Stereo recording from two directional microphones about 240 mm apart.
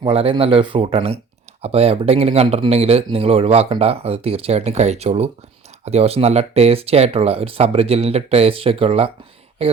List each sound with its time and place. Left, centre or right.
0.0 s speech: right